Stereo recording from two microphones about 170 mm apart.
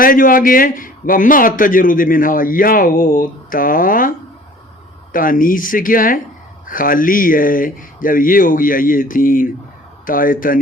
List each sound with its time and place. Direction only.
0.0 s a man's voice: 55° left (ahead or behind)
5.1 s a man's voice: 55° left (ahead or behind)